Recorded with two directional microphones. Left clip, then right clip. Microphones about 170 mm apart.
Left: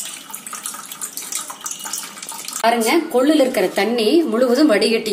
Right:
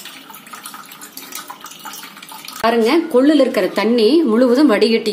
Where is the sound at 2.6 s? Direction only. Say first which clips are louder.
Right 2 dB; 55° right (ahead or behind).